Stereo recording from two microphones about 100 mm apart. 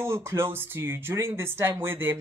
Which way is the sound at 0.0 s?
25° right (ahead or behind).